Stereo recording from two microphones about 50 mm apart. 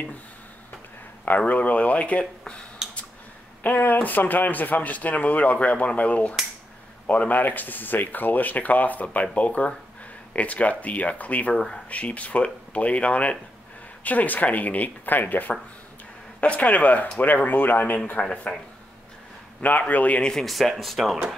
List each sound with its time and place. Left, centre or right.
1.5 s speech: left
3.6 s speech: left
11.5 s speech: centre
11.9 s speech: left
18.2 s speech: left
19.6 s speech: left
20.2 s speech: centre
20.4 s speech: centre